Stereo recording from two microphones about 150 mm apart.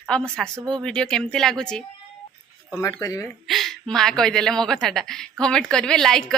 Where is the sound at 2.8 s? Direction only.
20° left (ahead or behind).